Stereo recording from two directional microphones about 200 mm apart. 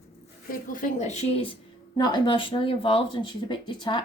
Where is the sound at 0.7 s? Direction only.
40° left (ahead or behind).